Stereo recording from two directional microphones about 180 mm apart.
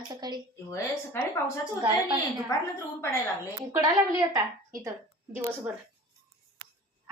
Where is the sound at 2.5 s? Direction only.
20° left (ahead or behind).